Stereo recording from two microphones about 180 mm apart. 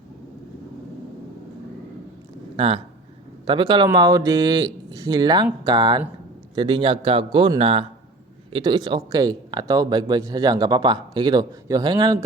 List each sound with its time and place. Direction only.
2.6 s a man's voice: 30° right (ahead or behind)